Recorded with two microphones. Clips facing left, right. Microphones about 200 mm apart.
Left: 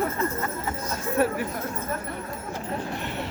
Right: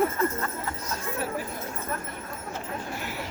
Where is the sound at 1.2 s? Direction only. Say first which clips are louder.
Left 11 dB; 60° left (ahead or behind).